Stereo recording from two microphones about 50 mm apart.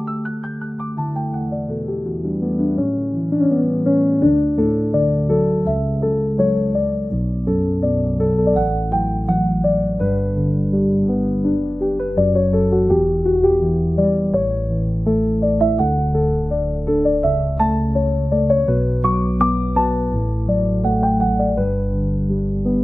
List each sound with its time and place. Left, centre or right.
3.3 s music: centre
6.4 s music: left
7.4 s music: centre